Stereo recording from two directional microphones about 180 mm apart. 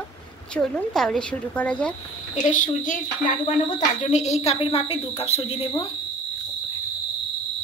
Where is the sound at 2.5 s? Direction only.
45° left (ahead or behind).